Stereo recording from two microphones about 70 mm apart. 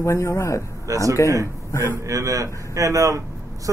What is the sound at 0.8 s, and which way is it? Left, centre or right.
A man's voice, right.